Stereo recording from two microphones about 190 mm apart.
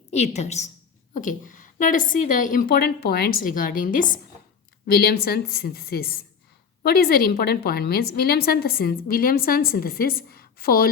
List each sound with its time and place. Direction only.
0.1 s a woman's voice: 35° left (ahead or behind); by 10.8 s 50° left (ahead or behind)